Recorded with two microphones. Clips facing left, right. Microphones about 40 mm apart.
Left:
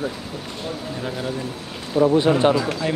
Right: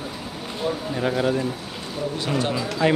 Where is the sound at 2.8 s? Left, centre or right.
Right.